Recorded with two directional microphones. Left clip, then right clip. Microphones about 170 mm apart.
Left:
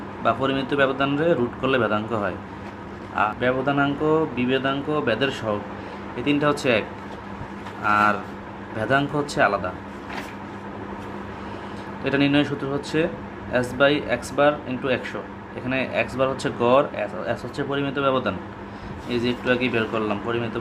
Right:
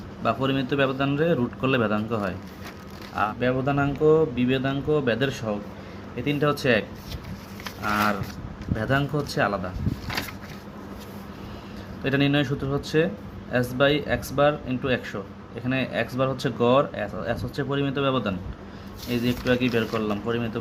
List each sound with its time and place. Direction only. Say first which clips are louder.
0.2 s speech: left 3 dB; 50° right (ahead or behind)
7.9 s speech: left 5 dB; 40° right (ahead or behind)
12.0 s speech: left 2 dB; 50° right (ahead or behind)